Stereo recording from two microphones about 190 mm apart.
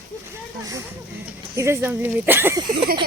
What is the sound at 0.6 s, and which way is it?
Speech, 20° right (ahead or behind).